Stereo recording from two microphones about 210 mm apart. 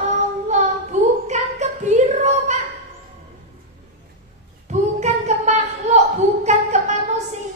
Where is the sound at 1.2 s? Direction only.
30° right (ahead or behind).